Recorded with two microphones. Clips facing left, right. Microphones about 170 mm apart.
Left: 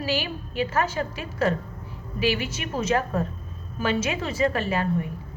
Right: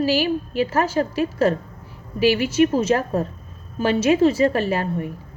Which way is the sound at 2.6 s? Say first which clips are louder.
Right 7 dB; 40° right (ahead or behind).